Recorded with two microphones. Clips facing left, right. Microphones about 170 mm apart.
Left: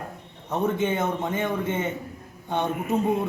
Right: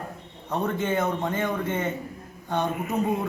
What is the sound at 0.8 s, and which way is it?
A man's voice, 20° left (ahead or behind).